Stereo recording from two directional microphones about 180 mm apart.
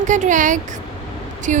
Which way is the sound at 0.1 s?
45° right (ahead or behind).